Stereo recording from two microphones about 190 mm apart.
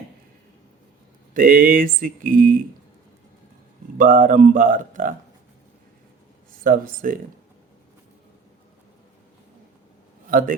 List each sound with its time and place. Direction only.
1.3 s speech: 45° right (ahead or behind)
3.9 s speech: 45° right (ahead or behind)
6.7 s speech: 45° right (ahead or behind)
10.2 s a man's voice: 45° right (ahead or behind)